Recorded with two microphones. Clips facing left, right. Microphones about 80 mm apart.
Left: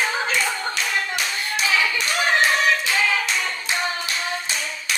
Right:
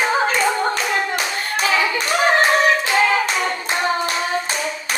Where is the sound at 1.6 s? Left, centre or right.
Right.